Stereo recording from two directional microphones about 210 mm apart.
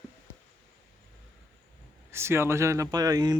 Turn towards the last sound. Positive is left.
turn(degrees=-15)  # may be behind; listen again after turning